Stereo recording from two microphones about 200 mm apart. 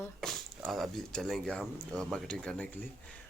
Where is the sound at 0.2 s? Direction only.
Centre (ahead or behind).